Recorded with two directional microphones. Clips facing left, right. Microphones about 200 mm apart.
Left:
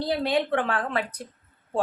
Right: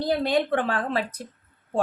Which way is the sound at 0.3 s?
35° right (ahead or behind).